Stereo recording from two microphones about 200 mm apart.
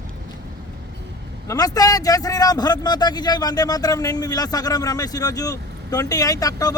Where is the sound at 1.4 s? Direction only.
20° left (ahead or behind).